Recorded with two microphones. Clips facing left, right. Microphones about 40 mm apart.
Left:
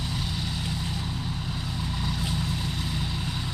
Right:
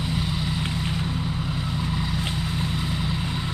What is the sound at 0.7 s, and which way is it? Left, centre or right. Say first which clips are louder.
Vehicle: right 4 dB; right.